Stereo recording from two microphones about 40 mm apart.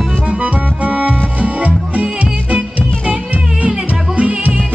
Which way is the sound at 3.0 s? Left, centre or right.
Right.